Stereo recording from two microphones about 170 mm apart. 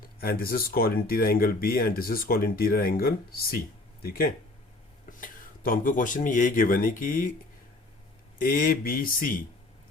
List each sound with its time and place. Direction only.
0.0 s speech: 60° left (ahead or behind)
8.4 s speech: 55° left (ahead or behind)